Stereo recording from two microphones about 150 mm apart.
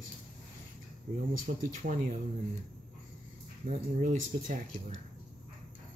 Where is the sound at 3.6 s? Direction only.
55° right (ahead or behind).